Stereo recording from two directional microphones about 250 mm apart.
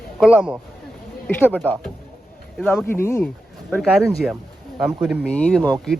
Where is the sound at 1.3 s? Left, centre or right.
Centre.